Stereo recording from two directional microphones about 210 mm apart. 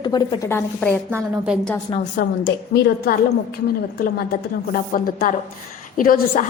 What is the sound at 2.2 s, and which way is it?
Speech, 50° left (ahead or behind).